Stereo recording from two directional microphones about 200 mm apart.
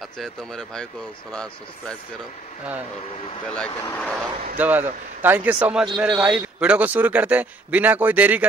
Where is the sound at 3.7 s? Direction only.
10° left (ahead or behind).